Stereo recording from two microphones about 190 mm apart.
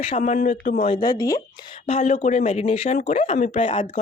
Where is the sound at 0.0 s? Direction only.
35° left (ahead or behind).